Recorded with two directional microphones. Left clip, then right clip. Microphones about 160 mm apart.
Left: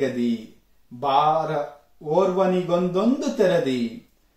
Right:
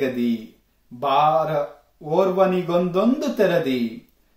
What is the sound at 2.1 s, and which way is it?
Speech, 5° right (ahead or behind).